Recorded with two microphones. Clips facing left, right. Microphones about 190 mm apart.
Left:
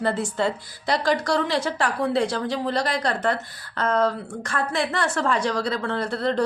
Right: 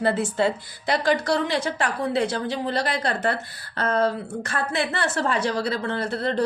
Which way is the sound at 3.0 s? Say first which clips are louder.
Left 1 dB; 30° right (ahead or behind).